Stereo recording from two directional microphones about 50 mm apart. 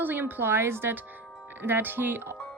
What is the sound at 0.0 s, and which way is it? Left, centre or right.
Speech, right.